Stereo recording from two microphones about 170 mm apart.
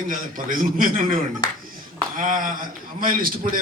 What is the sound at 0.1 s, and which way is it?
A man's voice, 55° right (ahead or behind).